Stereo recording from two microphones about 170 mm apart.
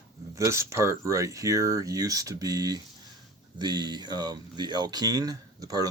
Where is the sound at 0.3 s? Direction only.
15° right (ahead or behind).